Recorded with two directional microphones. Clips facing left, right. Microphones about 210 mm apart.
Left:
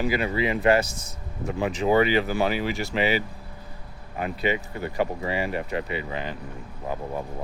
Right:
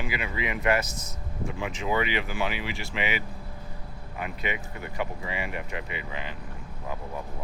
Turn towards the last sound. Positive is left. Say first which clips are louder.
# left 4 dB
turn(degrees=35)  # may be behind; listen again after turning